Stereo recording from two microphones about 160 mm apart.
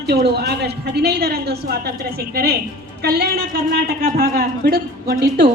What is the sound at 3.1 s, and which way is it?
A woman's voice, 70° right (ahead or behind).